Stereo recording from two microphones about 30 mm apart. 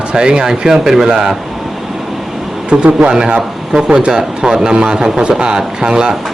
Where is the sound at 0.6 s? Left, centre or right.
Centre.